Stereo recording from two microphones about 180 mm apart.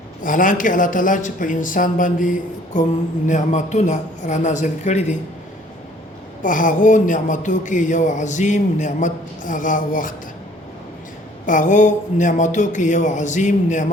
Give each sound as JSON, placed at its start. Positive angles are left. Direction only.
{"t": 0.2, "sound": "a man's voice", "side_deg": 45}
{"t": 6.4, "sound": "a man's voice", "side_deg": 45}
{"t": 11.4, "sound": "a man's voice", "side_deg": 45}